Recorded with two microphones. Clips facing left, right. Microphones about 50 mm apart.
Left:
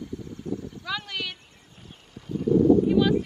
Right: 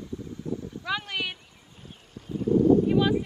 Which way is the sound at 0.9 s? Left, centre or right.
Centre.